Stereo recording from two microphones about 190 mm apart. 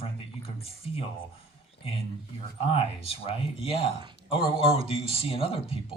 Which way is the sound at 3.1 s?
30° left (ahead or behind).